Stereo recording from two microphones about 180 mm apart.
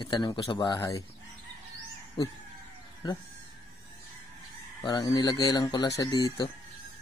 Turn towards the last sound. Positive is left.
turn(degrees=20)  # may be behind; listen again after turning